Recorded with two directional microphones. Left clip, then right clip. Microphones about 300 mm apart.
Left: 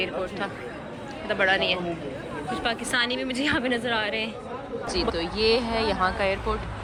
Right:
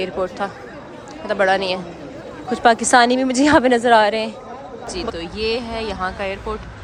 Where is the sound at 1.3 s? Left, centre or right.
Centre.